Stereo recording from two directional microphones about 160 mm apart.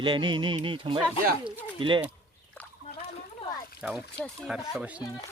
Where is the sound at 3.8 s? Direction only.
5° right (ahead or behind).